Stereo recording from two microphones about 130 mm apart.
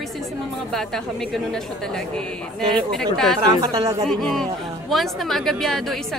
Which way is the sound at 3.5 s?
30° right (ahead or behind).